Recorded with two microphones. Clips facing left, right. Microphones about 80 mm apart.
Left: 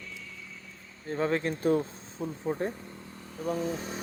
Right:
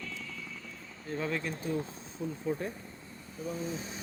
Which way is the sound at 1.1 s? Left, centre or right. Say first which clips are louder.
Left 6 dB; left.